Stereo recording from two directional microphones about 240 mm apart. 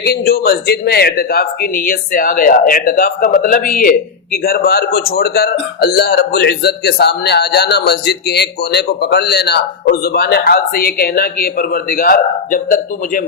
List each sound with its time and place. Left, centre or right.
0.0 s speech: left